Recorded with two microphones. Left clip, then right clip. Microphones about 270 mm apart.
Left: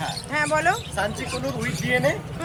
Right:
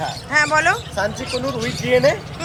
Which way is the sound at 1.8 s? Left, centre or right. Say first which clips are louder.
Right 7 dB; centre.